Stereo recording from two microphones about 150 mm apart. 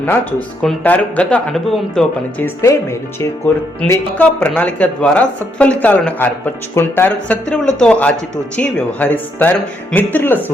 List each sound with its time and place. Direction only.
0.0 s speech: 10° left (ahead or behind)
2.4 s speech: 20° left (ahead or behind)
3.8 s speech: 15° left (ahead or behind)